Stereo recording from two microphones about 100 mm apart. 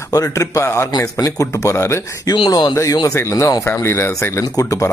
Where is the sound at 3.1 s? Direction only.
30° left (ahead or behind).